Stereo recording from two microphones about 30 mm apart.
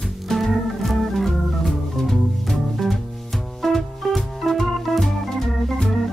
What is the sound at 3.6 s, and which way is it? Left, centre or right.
Music, centre.